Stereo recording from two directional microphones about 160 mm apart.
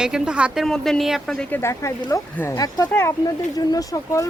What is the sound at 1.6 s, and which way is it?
Speech, 15° left (ahead or behind).